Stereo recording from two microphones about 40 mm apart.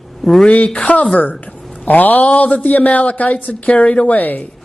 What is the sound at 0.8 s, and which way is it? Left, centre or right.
A man's voice, left.